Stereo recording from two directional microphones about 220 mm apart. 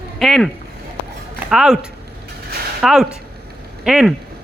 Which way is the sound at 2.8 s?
Centre (ahead or behind).